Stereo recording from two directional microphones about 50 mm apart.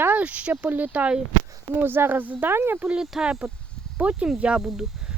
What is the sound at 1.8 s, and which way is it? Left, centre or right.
Speech, right.